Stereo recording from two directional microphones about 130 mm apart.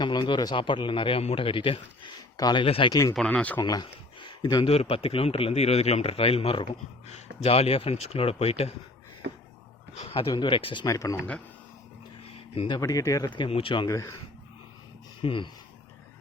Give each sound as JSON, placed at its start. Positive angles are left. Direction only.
{"t": 0.0, "sound": "a man's voice", "side_deg": 35}
{"t": 2.6, "sound": "speech", "side_deg": 45}
{"t": 2.9, "sound": "speech", "side_deg": 25}
{"t": 3.2, "sound": "speech", "side_deg": 10}
{"t": 3.6, "sound": "speech", "side_deg": 30}
{"t": 4.6, "sound": "speech", "side_deg": 50}
{"t": 10.0, "sound": "a man's voice", "side_deg": 45}
{"t": 10.8, "sound": "speech", "side_deg": 25}
{"t": 12.5, "sound": "a man's voice", "side_deg": 35}
{"t": 13.8, "sound": "speech", "side_deg": 25}
{"t": 15.2, "sound": "speech", "side_deg": 40}